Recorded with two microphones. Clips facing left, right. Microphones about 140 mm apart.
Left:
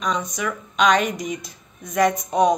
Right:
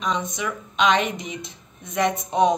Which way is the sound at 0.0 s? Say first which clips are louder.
Left 1 dB; 25° right (ahead or behind).